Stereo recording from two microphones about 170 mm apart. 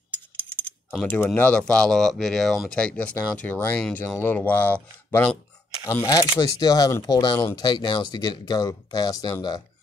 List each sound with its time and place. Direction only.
1.0 s speech: 10° left (ahead or behind)